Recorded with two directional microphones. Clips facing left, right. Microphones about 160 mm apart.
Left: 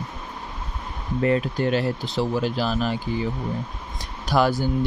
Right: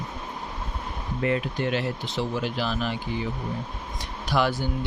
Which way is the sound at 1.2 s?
40° left (ahead or behind).